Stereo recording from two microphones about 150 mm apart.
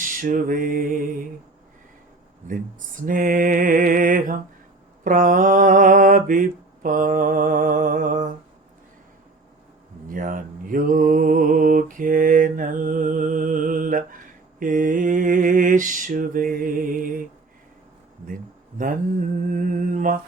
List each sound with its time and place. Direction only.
0.0 s lullaby: 65° right (ahead or behind)
3.1 s mantra: 65° right (ahead or behind)
10.1 s mantra: 65° right (ahead or behind)
19.5 s mantra: 60° right (ahead or behind)